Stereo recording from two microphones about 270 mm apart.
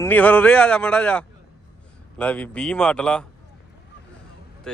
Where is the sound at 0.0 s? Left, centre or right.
Centre.